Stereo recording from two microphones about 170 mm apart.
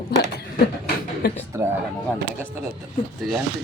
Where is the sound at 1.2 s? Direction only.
65° left (ahead or behind).